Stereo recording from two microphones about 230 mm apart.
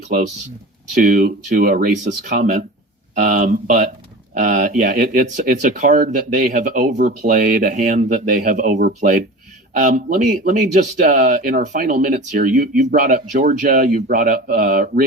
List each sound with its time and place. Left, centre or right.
0.9 s speech: right